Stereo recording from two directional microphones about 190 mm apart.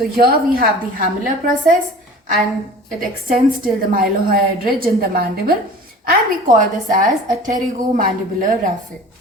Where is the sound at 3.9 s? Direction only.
50° right (ahead or behind).